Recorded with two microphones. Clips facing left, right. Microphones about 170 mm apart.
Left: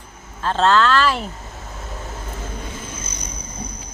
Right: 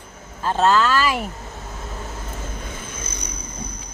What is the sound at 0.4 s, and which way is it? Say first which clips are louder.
Speech: left 1 dB; 10° right (ahead or behind).